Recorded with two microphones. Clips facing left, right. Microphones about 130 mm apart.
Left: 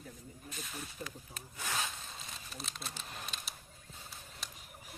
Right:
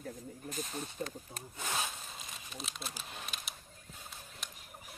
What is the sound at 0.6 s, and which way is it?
Speech, 30° right (ahead or behind).